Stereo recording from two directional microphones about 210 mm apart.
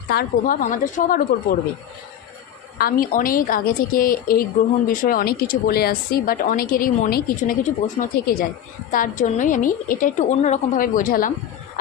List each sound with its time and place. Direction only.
0.1 s a woman's voice: 45° left (ahead or behind)
2.7 s a woman's voice: 45° left (ahead or behind)